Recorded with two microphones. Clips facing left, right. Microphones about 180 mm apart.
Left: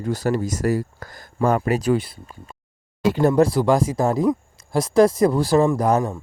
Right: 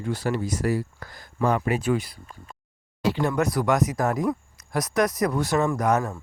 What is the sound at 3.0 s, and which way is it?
Speech, 45° left (ahead or behind).